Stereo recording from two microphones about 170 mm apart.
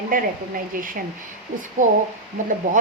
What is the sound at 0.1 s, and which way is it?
Speech, 55° right (ahead or behind).